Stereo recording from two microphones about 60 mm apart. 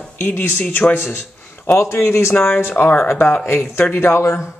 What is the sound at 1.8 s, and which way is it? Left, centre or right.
Speech, left.